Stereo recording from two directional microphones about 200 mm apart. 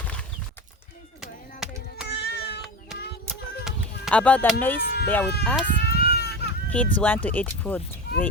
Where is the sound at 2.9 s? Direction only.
Centre (ahead or behind).